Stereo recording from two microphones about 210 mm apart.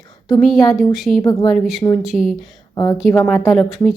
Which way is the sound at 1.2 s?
20° left (ahead or behind).